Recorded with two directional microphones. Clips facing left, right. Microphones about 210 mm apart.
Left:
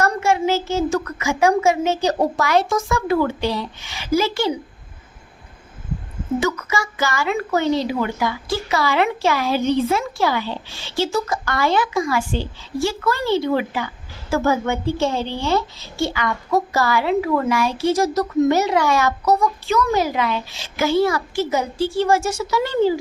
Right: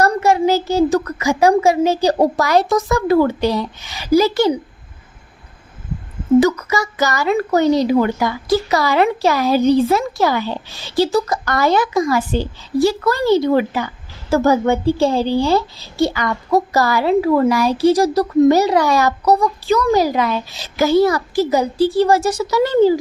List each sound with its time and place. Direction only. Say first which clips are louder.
0.0 s a woman's voice: right 4 dB; 35° right (ahead or behind)
6.4 s a woman's voice: right 6 dB; 40° right (ahead or behind)